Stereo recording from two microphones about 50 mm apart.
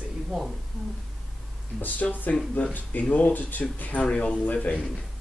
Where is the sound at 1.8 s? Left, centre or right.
Left.